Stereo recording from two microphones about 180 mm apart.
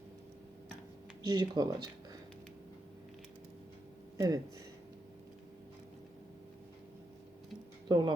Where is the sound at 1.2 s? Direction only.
20° right (ahead or behind).